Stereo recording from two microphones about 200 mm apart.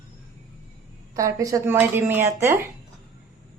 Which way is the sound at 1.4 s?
15° right (ahead or behind).